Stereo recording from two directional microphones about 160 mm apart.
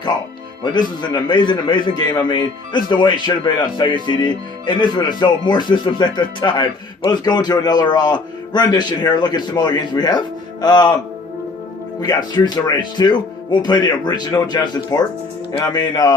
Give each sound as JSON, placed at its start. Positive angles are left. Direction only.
{"t": 0.6, "sound": "speech", "side_deg": 30}
{"t": 11.9, "sound": "speech", "side_deg": 25}